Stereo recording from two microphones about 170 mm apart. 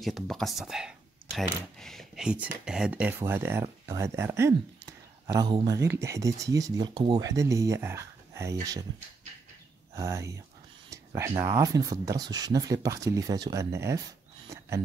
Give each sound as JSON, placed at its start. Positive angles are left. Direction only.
{"t": 0.0, "sound": "speech", "side_deg": 0}
{"t": 9.9, "sound": "speech", "side_deg": -15}